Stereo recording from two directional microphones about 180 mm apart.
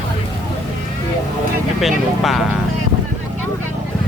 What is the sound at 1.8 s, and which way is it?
Speech, centre (ahead or behind).